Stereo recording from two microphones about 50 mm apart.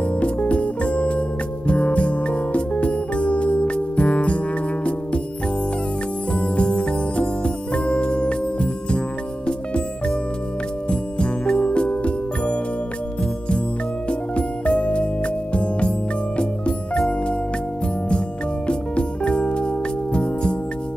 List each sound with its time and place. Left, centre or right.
0.1 s music: left
6.3 s music: left
14.3 s music: left
18.7 s music: left